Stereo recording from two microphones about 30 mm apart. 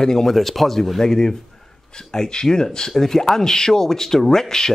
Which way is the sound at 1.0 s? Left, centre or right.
Centre.